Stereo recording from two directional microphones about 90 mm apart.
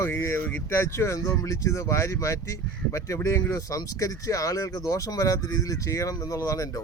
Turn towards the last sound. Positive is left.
turn(degrees=40)  # may be behind; listen again after turning